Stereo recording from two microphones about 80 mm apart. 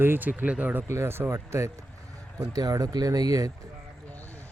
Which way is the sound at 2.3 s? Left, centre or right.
Right.